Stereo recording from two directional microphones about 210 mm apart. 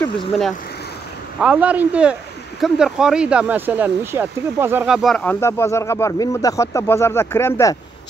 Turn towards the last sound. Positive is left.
turn(degrees=15)  # may be behind; listen again after turning